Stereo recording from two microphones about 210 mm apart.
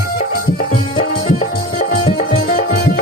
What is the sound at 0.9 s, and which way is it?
Music, 35° left (ahead or behind).